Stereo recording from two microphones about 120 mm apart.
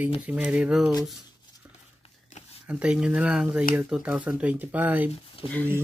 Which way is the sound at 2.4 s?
80° left.